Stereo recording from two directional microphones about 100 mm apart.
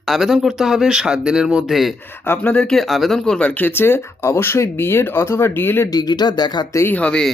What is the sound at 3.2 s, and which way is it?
Speech, 10° left (ahead or behind).